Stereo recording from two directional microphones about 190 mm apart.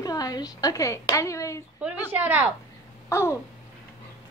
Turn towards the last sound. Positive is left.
turn(degrees=15)  # may be behind; listen again after turning